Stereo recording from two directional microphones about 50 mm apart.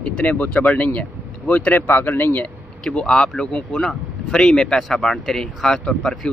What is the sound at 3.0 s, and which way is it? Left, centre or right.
Speech, centre.